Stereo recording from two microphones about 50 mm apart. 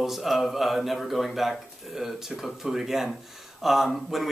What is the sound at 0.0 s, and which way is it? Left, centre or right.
Speech, centre.